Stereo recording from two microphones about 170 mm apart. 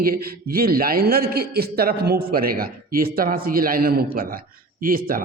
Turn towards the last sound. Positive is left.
turn(degrees=-55)  # may be behind; listen again after turning